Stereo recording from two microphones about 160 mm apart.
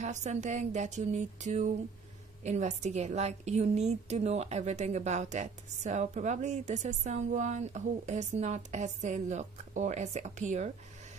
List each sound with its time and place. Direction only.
0.0 s a woman's voice: 45° right (ahead or behind)